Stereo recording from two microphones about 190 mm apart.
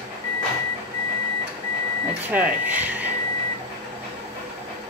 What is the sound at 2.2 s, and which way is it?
Speech, 10° right (ahead or behind).